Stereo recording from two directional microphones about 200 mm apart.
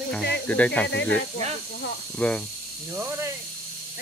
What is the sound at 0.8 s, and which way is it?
Speech, 60° left (ahead or behind).